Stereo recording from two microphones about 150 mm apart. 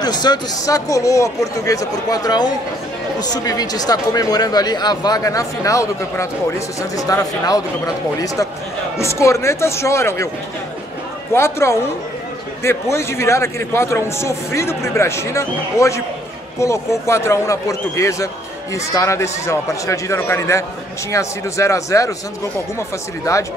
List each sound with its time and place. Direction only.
0.0 s speech: 30° left (ahead or behind)
11.3 s a man's voice: 15° left (ahead or behind)
12.9 s a man's voice: 20° left (ahead or behind)
23.3 s speech: 25° left (ahead or behind)